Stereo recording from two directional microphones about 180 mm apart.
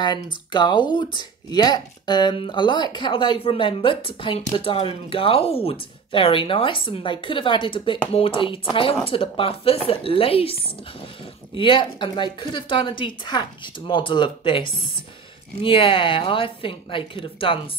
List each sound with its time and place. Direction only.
0.0 s speech: 25° left (ahead or behind)